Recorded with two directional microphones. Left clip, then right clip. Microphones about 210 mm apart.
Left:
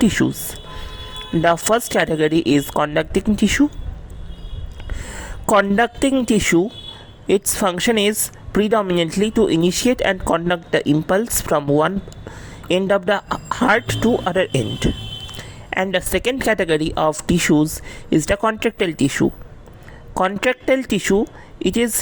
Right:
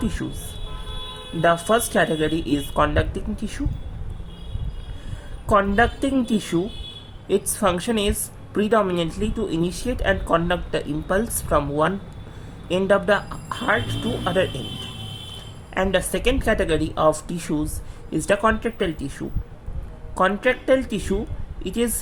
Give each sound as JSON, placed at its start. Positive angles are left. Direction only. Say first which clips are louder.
{"t": 0.0, "sound": "a woman's voice", "louder": "left 12 dB", "side_deg": 40}
{"t": 1.4, "sound": "speech", "louder": "left 2 dB", "side_deg": 40}
{"t": 5.5, "sound": "a woman's voice", "louder": "left 3 dB", "side_deg": 45}
{"t": 15.7, "sound": "a woman's voice", "louder": "left 2 dB", "side_deg": 40}